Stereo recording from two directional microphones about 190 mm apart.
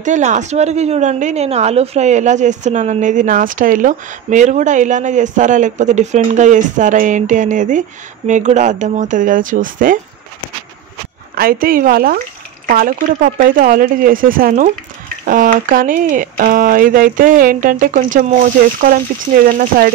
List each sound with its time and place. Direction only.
0.0 s a woman's voice: 40° right (ahead or behind)
11.3 s speech: 50° right (ahead or behind)
19.4 s speech: 50° right (ahead or behind)